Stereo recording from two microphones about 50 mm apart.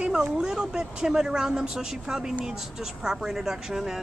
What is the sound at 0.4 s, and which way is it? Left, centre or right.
A woman's voice, centre.